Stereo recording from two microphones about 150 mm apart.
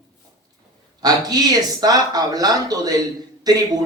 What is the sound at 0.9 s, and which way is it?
Speech, 25° right (ahead or behind).